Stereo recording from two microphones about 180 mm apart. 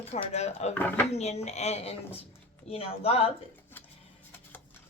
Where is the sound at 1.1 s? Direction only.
35° left (ahead or behind).